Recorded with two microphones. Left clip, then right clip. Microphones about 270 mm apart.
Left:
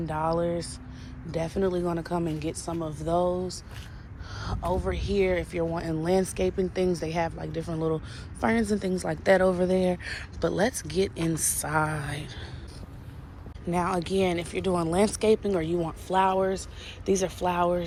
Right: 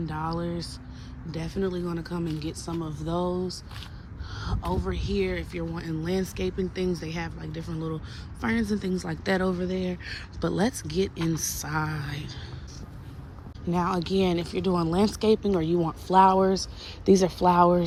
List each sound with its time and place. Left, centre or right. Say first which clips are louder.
0.0 s a woman's voice: left 5 dB; centre
13.7 s a woman's voice: even; centre